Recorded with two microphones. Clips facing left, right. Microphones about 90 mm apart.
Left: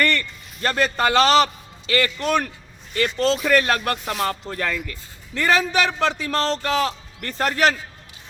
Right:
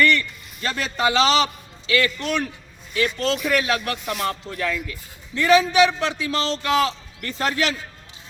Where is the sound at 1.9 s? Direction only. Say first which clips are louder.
Left 1 dB; 40° left (ahead or behind).